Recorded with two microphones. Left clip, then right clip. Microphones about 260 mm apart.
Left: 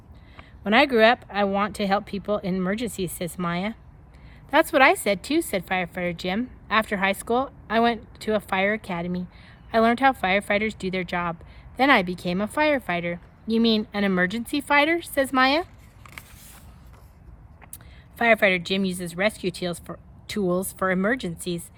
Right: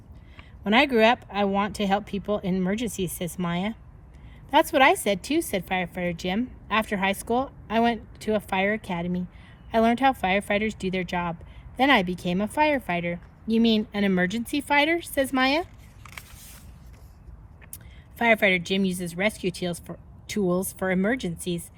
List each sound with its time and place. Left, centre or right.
0.6 s speech: left
2.9 s speech: left
3.2 s a woman's voice: left
18.2 s a woman's voice: left